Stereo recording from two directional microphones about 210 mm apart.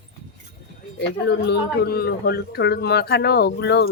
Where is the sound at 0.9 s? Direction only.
55° left (ahead or behind).